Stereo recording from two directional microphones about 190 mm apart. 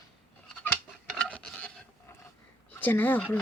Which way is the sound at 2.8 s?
10° left (ahead or behind).